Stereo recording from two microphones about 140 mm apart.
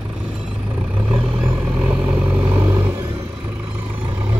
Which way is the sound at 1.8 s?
10° right (ahead or behind).